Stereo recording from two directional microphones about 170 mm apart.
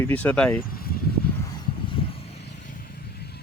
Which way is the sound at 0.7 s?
60° left (ahead or behind).